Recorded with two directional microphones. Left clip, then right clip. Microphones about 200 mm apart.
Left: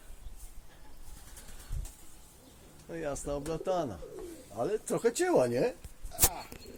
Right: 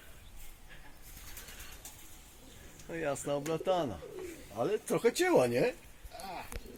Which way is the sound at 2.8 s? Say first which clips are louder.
Right 1 dB; 10° right (ahead or behind).